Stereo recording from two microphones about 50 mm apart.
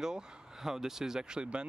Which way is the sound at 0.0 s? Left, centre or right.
Centre.